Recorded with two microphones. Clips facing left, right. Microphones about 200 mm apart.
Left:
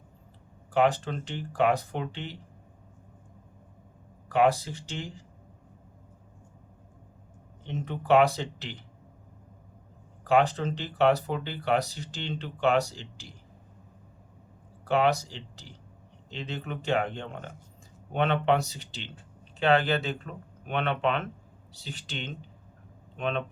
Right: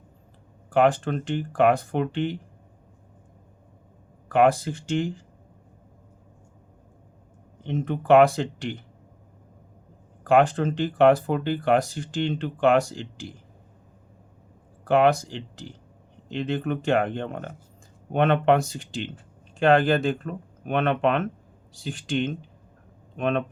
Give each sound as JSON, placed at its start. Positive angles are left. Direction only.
{"t": 0.7, "sound": "speech", "side_deg": -55}
{"t": 4.3, "sound": "speech", "side_deg": -50}
{"t": 7.7, "sound": "speech", "side_deg": -50}
{"t": 10.2, "sound": "speech", "side_deg": -50}
{"t": 14.8, "sound": "speech", "side_deg": -50}